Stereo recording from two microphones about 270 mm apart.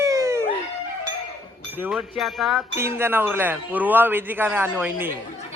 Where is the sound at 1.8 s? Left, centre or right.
Centre.